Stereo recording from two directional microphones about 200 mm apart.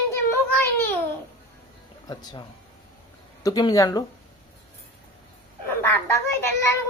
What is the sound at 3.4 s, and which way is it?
Speech, 20° left (ahead or behind).